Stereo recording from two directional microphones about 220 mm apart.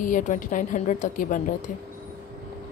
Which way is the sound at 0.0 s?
35° left (ahead or behind).